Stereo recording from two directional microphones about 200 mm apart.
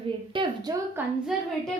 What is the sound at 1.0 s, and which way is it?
Speech, 10° right (ahead or behind).